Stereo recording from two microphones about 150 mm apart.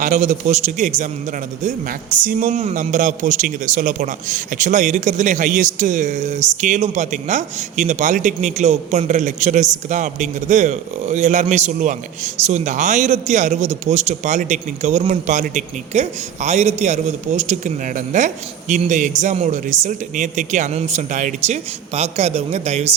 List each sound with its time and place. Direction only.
0.0 s speech: 55° right (ahead or behind)
1.6 s a man's voice: 65° right (ahead or behind)
2.6 s a man's voice: 45° right (ahead or behind)